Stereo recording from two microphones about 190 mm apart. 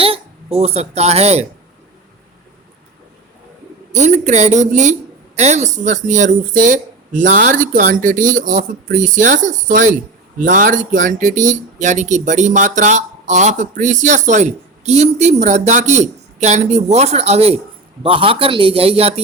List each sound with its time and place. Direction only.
0.0 s speech: 30° right (ahead or behind)
3.9 s a man's voice: 35° right (ahead or behind)